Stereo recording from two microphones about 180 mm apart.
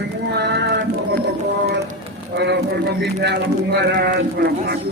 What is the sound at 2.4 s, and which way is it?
Speech, 65° right (ahead or behind).